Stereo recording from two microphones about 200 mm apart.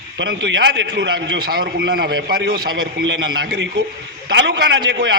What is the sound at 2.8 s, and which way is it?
A man's voice, 60° right (ahead or behind).